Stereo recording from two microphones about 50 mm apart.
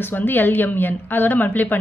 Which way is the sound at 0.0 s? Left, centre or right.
Left.